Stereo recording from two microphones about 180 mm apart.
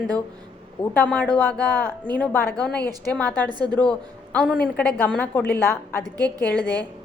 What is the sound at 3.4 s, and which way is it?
Speech, 25° right (ahead or behind).